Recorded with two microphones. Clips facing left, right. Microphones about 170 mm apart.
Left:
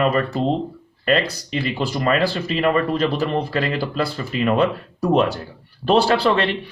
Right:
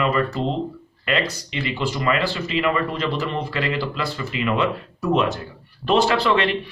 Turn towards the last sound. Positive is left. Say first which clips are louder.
# left 2 dB
turn(degrees=35)  # may be behind; listen again after turning